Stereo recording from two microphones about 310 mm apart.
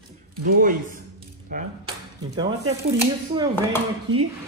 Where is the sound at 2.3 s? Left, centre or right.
Centre.